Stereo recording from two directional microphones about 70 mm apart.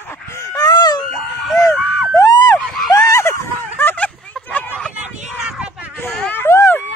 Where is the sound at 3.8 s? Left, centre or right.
Left.